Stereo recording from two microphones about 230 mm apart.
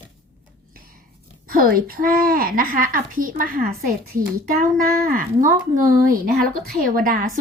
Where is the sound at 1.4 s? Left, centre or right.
Right.